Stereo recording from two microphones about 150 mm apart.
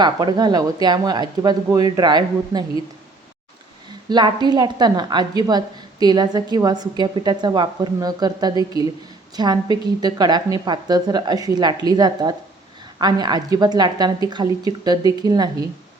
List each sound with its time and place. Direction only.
0.0 s a woman's voice: 25° right (ahead or behind)
4.1 s a woman's voice: 30° right (ahead or behind)